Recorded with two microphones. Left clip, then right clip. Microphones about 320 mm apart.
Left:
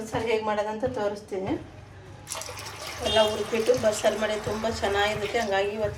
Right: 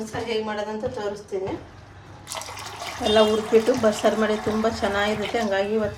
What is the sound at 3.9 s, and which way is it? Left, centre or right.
A woman's voice, right.